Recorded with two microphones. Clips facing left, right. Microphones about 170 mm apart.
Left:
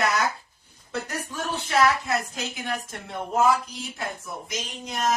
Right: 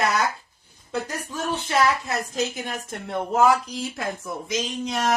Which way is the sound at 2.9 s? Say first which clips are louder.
Right 5 dB; 75° right (ahead or behind).